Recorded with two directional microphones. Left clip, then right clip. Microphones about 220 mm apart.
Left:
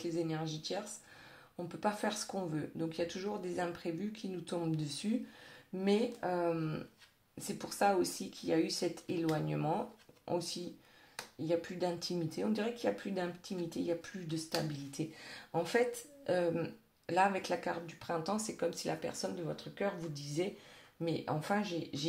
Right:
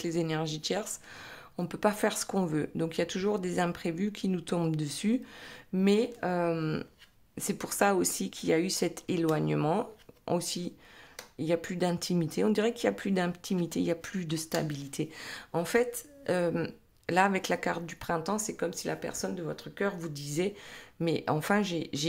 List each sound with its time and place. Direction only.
0.0 s speech: 35° right (ahead or behind)